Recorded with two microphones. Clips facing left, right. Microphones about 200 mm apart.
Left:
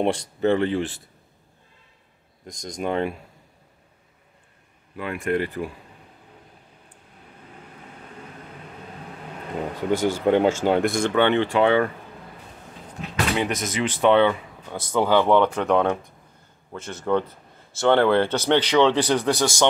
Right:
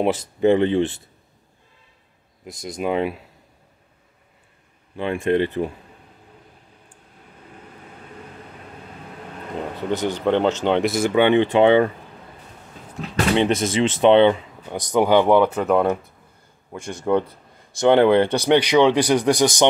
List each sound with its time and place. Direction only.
0.0 s speech: 5° right (ahead or behind)
0.4 s speech: 20° right (ahead or behind)
2.4 s speech: 5° right (ahead or behind)
4.9 s speech: 25° right (ahead or behind)
9.8 s speech: 10° left (ahead or behind); by 11.9 s 20° right (ahead or behind)
13.1 s speech: 25° right (ahead or behind)